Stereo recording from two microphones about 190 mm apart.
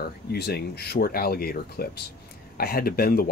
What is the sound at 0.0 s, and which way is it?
Speech, 55° left (ahead or behind).